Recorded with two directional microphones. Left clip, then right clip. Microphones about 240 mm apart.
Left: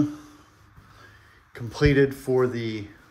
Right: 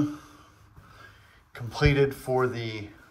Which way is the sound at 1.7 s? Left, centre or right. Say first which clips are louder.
Left 3 dB; centre.